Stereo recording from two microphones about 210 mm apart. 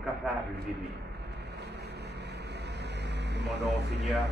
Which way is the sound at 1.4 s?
50° right (ahead or behind).